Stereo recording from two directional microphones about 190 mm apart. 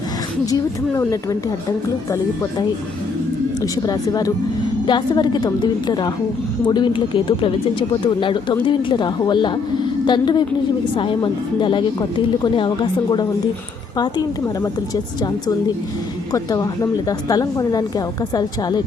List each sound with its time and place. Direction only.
0.5 s a woman's voice: 15° left (ahead or behind)
16.3 s a woman's voice: 20° left (ahead or behind)